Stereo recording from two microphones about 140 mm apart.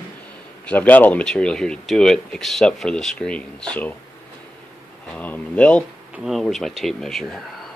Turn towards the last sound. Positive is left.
turn(degrees=0)  # may be behind; listen again after turning